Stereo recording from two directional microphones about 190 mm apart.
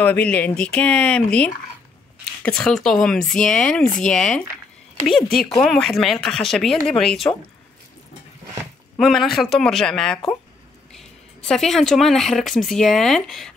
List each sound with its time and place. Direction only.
0.0 s speech: 10° left (ahead or behind)
8.9 s speech: centre (ahead or behind)